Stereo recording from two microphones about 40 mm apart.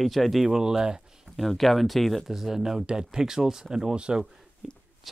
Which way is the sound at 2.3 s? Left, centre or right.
Centre.